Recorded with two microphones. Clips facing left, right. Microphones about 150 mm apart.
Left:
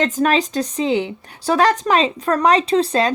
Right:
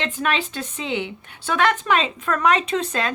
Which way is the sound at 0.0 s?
40° left (ahead or behind).